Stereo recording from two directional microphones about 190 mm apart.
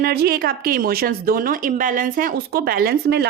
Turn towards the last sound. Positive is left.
turn(degrees=-60)  # may be behind; listen again after turning